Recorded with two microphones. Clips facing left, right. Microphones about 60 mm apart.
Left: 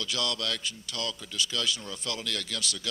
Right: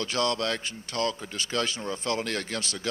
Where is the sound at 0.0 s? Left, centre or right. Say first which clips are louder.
Right 5 dB; right.